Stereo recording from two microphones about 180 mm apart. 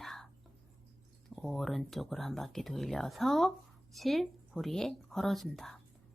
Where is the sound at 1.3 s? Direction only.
Centre (ahead or behind).